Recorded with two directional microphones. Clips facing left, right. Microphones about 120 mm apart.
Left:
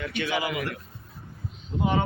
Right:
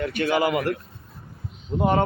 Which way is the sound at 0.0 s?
50° right (ahead or behind).